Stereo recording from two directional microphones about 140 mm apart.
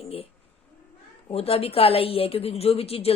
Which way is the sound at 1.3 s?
45° left (ahead or behind).